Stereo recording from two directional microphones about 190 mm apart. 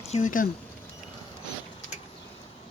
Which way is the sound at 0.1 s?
45° left (ahead or behind).